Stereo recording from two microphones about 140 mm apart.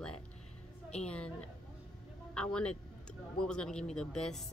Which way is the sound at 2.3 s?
5° left (ahead or behind).